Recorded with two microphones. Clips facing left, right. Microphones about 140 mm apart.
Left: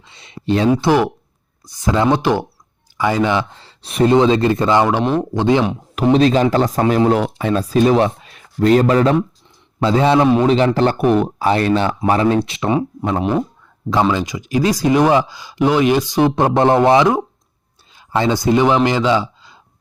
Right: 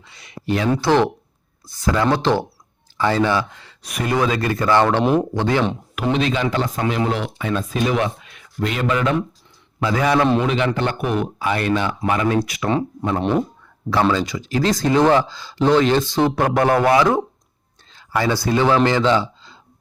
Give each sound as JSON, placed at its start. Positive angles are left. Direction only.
{"t": 0.1, "sound": "speech", "side_deg": 25}
{"t": 0.7, "sound": "speech", "side_deg": 10}
{"t": 3.5, "sound": "speech", "side_deg": 30}
{"t": 4.8, "sound": "speech", "side_deg": 10}
{"t": 6.0, "sound": "speech", "side_deg": 35}
{"t": 13.9, "sound": "speech", "side_deg": 15}